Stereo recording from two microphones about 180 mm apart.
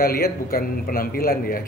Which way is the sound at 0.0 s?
55° left (ahead or behind).